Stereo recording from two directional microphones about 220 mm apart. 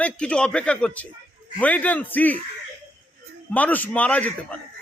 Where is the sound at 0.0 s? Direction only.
5° left (ahead or behind).